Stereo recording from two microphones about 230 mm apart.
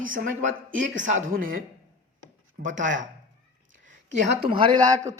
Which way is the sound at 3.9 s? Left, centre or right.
Right.